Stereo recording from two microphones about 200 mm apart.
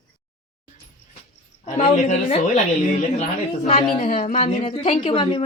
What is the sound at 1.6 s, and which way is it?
A woman's voice, 35° left (ahead or behind).